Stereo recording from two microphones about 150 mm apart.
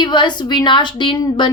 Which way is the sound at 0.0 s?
30° left (ahead or behind).